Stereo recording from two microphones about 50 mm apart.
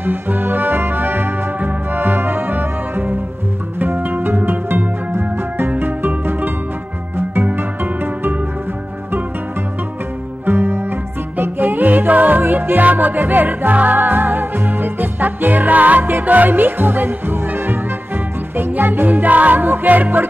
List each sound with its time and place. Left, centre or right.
0.0 s music: right
10.4 s music: right